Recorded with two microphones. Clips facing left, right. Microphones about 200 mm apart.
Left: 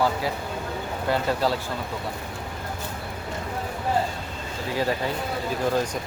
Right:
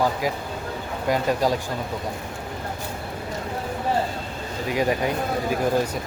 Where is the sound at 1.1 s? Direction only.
15° right (ahead or behind).